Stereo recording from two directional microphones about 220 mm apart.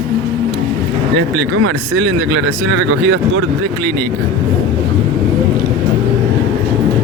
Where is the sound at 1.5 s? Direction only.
85° right; by 3.4 s 60° right (ahead or behind).